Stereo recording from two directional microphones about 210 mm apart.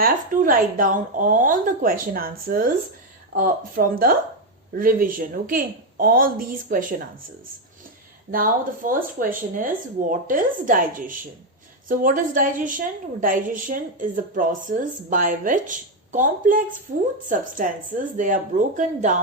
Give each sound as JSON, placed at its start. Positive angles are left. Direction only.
{"t": 0.0, "sound": "a woman's voice", "side_deg": -40}
{"t": 8.3, "sound": "a woman's voice", "side_deg": -40}